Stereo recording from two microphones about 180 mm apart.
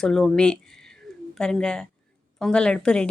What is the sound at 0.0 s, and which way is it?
Speech, 5° left (ahead or behind).